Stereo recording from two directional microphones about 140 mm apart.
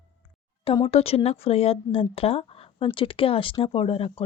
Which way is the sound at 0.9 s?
45° left (ahead or behind).